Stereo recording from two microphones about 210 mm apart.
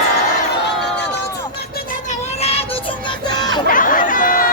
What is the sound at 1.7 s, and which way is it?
Child singing, 35° left (ahead or behind).